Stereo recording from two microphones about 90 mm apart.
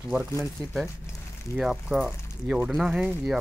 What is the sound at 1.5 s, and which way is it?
Speech, 5° right (ahead or behind).